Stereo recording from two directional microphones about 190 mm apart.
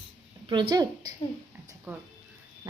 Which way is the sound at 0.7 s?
20° right (ahead or behind).